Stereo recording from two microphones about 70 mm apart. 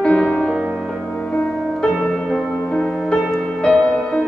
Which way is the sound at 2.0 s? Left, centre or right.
Centre.